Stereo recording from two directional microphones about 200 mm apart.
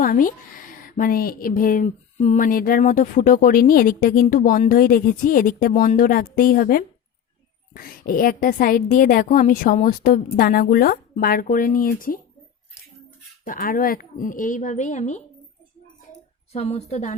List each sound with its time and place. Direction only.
0.0 s speech: 45° left (ahead or behind)
13.4 s speech: 45° left (ahead or behind)
16.5 s speech: 30° left (ahead or behind)